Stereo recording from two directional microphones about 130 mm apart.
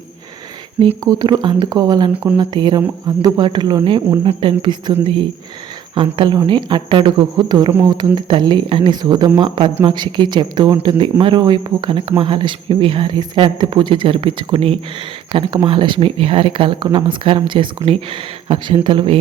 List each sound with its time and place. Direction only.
1.0 s speech: 30° right (ahead or behind); by 19.2 s 45° right (ahead or behind)